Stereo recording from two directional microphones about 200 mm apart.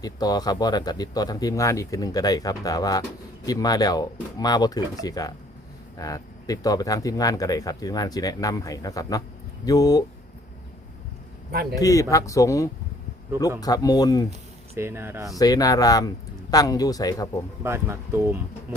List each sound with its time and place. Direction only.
0.0 s speech: 20° left (ahead or behind)
11.7 s speech: 15° left (ahead or behind)
14.8 s speech: 10° right (ahead or behind)
15.3 s speech: 20° left (ahead or behind)
17.6 s speech: 15° right (ahead or behind)